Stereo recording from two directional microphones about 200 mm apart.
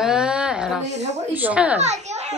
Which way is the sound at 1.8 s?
35° right (ahead or behind).